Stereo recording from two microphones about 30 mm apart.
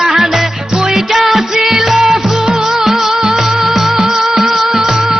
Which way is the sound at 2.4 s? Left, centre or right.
Centre.